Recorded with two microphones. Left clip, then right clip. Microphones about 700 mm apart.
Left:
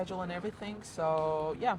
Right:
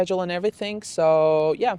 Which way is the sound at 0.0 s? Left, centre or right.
Right.